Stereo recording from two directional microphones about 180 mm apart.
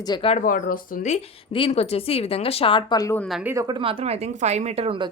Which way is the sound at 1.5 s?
30° left (ahead or behind).